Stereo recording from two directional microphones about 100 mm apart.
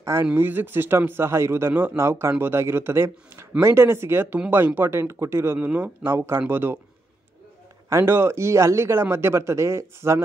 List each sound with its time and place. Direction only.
0.0 s speech: 30° right (ahead or behind)
7.9 s speech: 25° right (ahead or behind)